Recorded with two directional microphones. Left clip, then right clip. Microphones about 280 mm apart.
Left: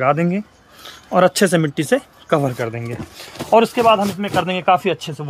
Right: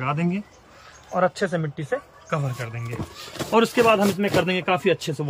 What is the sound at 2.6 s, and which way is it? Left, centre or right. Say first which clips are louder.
Speech: left 10 dB; centre.